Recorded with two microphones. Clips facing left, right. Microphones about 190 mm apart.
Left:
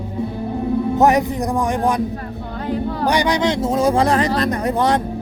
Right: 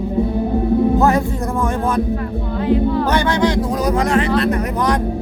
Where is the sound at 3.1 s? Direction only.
15° left (ahead or behind); by 5.0 s 30° left (ahead or behind).